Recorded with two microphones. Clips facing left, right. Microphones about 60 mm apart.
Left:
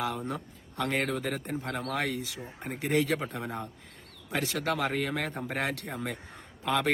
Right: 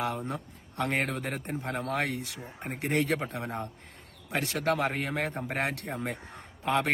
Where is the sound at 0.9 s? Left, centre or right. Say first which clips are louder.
Left 2 dB; right.